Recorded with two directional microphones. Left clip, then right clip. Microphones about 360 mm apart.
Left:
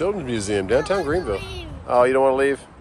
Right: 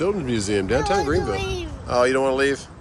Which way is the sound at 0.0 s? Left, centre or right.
Centre.